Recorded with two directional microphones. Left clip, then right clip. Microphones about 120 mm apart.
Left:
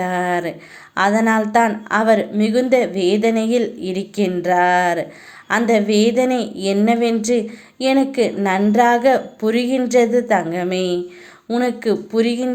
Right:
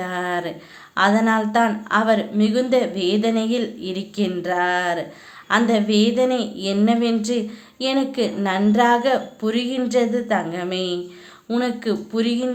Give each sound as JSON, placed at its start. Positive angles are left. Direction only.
{"t": 0.0, "sound": "a sound", "side_deg": 35}
{"t": 0.9, "sound": "speech", "side_deg": 35}
{"t": 11.4, "sound": "speech", "side_deg": 20}
{"t": 11.8, "sound": "speech", "side_deg": 35}